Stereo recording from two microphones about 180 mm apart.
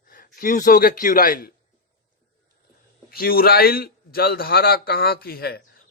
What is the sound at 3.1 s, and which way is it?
A man's voice, 55° left (ahead or behind).